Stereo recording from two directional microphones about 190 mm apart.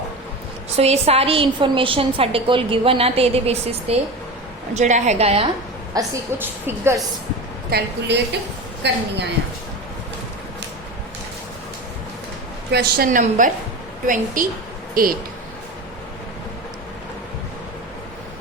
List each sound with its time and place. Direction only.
0.8 s a woman's voice: 35° right (ahead or behind)
5.9 s a woman's voice: 15° right (ahead or behind)
7.7 s a woman's voice: 65° right (ahead or behind)
12.7 s a woman's voice: 55° right (ahead or behind)